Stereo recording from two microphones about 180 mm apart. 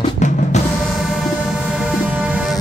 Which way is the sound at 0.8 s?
Centre (ahead or behind).